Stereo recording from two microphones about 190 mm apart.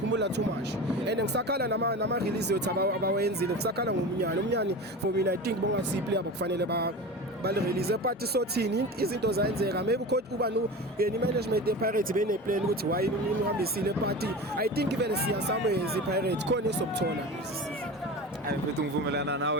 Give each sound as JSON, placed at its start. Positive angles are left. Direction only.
{"t": 0.1, "sound": "vehicle", "side_deg": -65}
{"t": 1.0, "sound": "speech", "side_deg": -60}
{"t": 19.1, "sound": "speech", "side_deg": -65}